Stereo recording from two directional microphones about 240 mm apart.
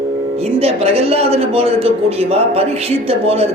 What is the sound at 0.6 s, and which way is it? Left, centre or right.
A man's voice, right.